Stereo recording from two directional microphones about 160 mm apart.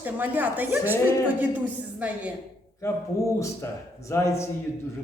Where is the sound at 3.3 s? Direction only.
20° left (ahead or behind).